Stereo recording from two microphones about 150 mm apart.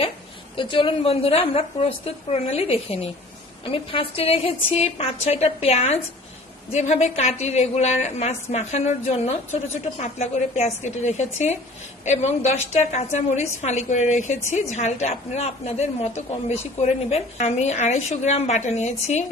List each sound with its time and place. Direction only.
0.6 s a woman's voice: 35° left (ahead or behind)